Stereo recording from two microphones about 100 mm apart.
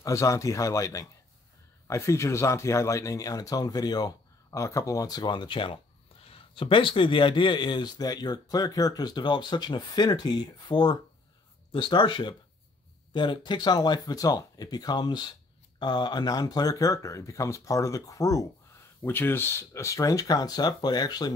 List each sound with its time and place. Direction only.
0.0 s speech: 30° left (ahead or behind); by 5.7 s 50° left (ahead or behind)
6.2 s speech: 65° left (ahead or behind); by 18.5 s 35° left (ahead or behind)
19.0 s speech: 20° left (ahead or behind); by 21.3 s 40° left (ahead or behind)